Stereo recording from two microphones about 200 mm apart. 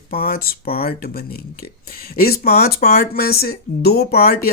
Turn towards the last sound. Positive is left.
turn(degrees=50)  # may be behind; listen again after turning